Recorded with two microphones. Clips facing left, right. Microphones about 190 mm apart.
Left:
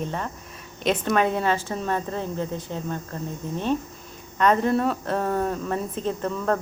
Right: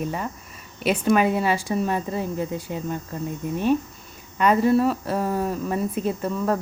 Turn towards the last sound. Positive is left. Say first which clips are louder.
# right 1 dB
turn(degrees=-5)  # may be behind; listen again after turning